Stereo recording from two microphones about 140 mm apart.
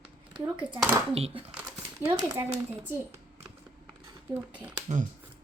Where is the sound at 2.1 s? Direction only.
30° right (ahead or behind).